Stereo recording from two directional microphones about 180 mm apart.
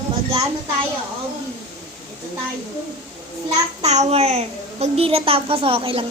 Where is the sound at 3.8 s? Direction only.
40° right (ahead or behind).